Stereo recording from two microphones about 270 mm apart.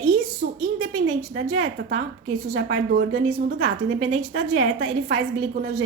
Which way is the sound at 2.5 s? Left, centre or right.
Right.